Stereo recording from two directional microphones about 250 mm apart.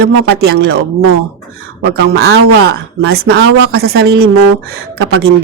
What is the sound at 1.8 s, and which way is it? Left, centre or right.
Speech, right.